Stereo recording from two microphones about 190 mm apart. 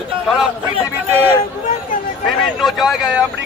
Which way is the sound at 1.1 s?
10° right (ahead or behind).